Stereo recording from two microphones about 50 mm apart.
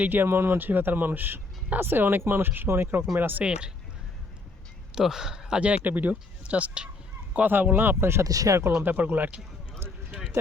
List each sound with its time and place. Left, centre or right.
0.0 s speech: right
0.3 s speech: right
0.6 s speech: right
3.4 s speech: centre
4.9 s speech: centre
5.8 s speech: right
7.4 s speech: right
8.0 s speech: right
8.8 s speech: right
9.8 s a sound: right